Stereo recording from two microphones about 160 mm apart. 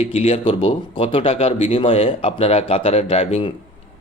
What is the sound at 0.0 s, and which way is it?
A man's voice, 35° left (ahead or behind).